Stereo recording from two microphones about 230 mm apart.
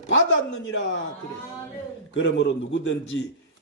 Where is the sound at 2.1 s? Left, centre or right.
Left.